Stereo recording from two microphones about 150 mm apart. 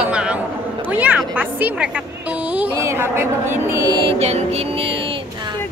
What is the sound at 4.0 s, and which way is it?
Music, 40° right (ahead or behind).